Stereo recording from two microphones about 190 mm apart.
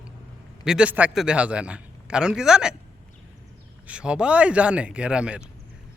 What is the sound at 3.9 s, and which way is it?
Speech, 5° right (ahead or behind).